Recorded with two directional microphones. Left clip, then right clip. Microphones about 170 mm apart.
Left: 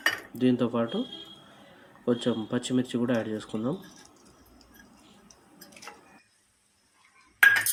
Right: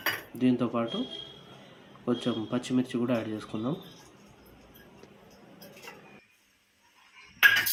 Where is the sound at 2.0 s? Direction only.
15° left (ahead or behind).